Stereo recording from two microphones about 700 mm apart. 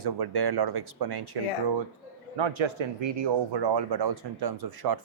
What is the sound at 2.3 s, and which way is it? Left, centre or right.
Speech, right.